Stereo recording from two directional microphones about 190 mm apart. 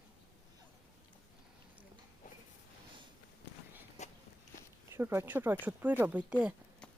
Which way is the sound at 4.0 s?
35° left (ahead or behind).